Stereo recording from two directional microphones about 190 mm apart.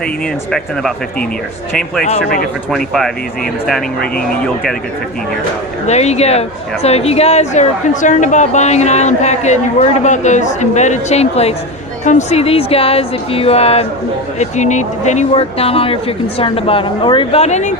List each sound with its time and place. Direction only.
0.5 s speech: centre (ahead or behind)
2.0 s a woman's voice: 35° left (ahead or behind)
2.6 s speech: centre (ahead or behind)
5.8 s a woman's voice: 35° left (ahead or behind)